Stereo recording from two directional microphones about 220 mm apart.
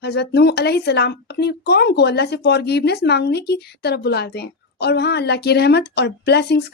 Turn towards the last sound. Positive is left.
turn(degrees=50)  # may be behind; listen again after turning